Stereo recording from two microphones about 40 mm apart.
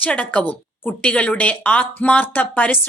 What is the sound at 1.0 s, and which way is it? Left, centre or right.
A woman's voice, left.